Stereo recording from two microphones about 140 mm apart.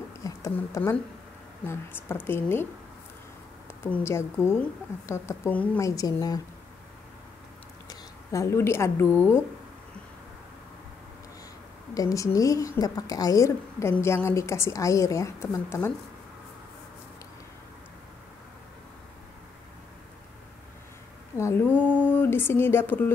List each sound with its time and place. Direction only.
0.2 s a sound: 20° left (ahead or behind)
1.7 s a woman's voice: 15° left (ahead or behind)
7.9 s speech: 20° left (ahead or behind)
11.9 s a woman's voice: 25° left (ahead or behind)
21.4 s mantra: 20° left (ahead or behind)
22.1 s speech: 15° left (ahead or behind)